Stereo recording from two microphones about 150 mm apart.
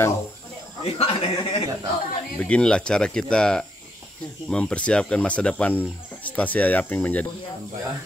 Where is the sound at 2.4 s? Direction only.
5° left (ahead or behind).